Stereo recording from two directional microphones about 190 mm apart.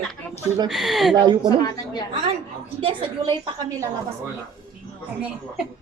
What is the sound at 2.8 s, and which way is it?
Speech, 25° right (ahead or behind).